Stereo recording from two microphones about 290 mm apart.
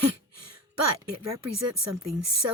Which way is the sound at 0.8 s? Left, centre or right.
Right.